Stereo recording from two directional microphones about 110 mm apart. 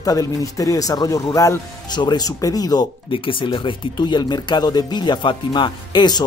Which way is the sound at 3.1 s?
50° left (ahead or behind).